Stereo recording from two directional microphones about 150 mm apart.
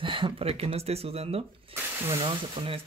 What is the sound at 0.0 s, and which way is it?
Speech, 35° right (ahead or behind).